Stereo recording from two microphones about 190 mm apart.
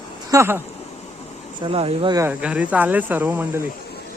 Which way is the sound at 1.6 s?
30° right (ahead or behind).